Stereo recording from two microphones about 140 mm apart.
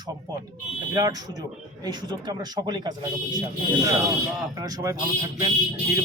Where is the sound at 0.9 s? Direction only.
25° right (ahead or behind).